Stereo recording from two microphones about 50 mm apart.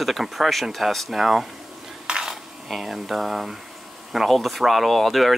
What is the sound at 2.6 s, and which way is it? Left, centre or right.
Speech, centre.